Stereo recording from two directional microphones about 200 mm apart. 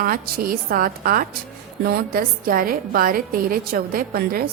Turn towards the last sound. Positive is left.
turn(degrees=-50)  # may be behind; listen again after turning